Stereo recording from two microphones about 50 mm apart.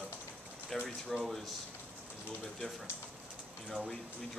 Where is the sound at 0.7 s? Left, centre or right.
Centre.